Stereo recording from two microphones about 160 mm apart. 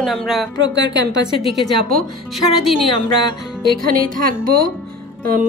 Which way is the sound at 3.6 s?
70° right (ahead or behind).